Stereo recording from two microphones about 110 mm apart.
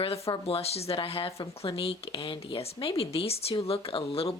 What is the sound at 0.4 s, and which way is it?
Speech, 65° left (ahead or behind).